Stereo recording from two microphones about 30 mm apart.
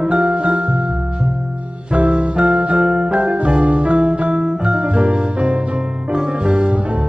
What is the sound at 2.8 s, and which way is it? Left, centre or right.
Music, right.